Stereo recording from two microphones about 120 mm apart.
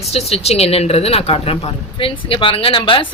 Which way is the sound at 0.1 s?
55° left (ahead or behind).